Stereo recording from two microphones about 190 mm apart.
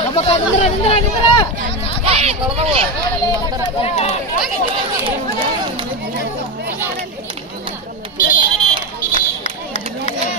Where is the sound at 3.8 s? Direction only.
30° left (ahead or behind).